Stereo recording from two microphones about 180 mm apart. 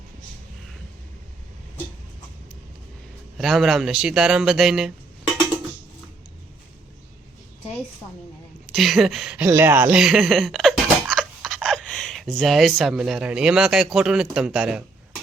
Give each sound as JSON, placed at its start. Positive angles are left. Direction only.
{"t": 3.3, "sound": "speech", "side_deg": 0}
{"t": 8.7, "sound": "speech", "side_deg": 0}
{"t": 9.5, "sound": "a sound", "side_deg": -10}
{"t": 12.7, "sound": "speech", "side_deg": -5}